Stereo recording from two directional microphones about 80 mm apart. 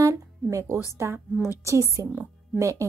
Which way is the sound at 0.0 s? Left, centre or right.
Right.